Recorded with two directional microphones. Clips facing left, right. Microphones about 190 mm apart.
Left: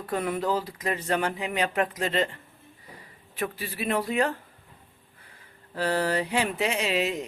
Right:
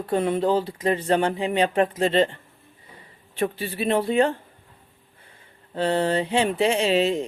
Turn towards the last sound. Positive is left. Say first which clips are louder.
# right 6 dB
turn(degrees=-30)  # may be behind; listen again after turning